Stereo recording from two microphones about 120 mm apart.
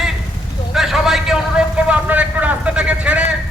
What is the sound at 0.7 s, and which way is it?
A man's voice, 5° right (ahead or behind).